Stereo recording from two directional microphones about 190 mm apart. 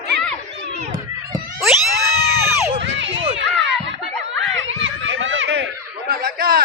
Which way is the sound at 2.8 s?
70° right (ahead or behind).